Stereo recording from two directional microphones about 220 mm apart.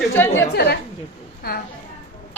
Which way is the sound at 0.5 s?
50° left (ahead or behind).